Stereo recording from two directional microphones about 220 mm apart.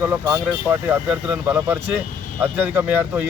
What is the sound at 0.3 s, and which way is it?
Speech, 10° right (ahead or behind).